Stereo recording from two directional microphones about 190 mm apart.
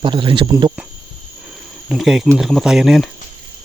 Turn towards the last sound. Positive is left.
turn(degrees=0)  # may be behind; listen again after turning